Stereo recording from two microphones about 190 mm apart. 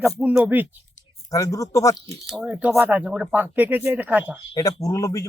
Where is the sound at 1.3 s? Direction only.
15° left (ahead or behind).